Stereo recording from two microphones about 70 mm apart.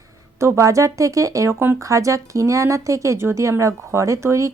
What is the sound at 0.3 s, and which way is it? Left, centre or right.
A woman's voice, right.